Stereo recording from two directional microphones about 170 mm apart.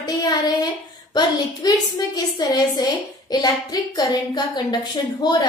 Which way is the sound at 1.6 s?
25° left (ahead or behind).